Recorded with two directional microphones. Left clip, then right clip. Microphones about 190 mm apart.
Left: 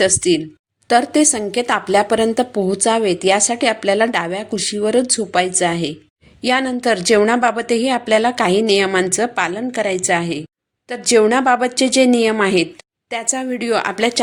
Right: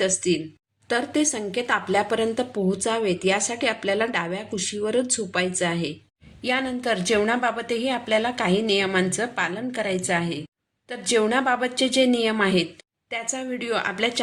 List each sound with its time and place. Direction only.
0.0 s a woman's voice: 45° left (ahead or behind)